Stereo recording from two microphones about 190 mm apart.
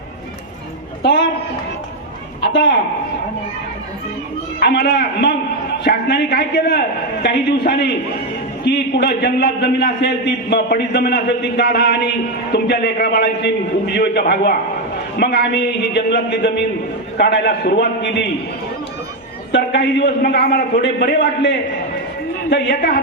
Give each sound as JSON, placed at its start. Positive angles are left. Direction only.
{"t": 4.6, "sound": "a man's voice", "side_deg": 60}
{"t": 19.5, "sound": "a man's voice", "side_deg": 65}